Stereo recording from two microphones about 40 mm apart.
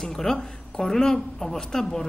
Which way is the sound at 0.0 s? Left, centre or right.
Centre.